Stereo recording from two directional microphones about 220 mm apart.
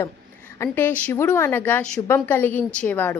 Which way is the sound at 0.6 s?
10° left (ahead or behind).